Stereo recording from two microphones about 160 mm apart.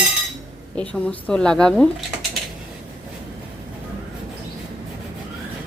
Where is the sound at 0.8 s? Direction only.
5° left (ahead or behind).